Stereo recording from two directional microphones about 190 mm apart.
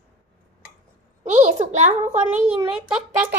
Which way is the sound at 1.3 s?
40° right (ahead or behind).